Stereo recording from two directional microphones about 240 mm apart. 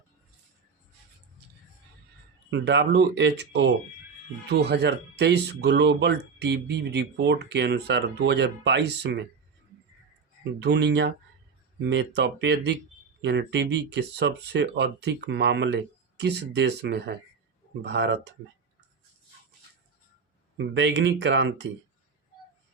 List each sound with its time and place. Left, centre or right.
2.5 s speech: right
10.6 s speech: right
20.6 s speech: right